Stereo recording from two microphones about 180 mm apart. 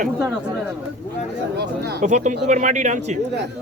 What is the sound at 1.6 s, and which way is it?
Speech, 65° right (ahead or behind).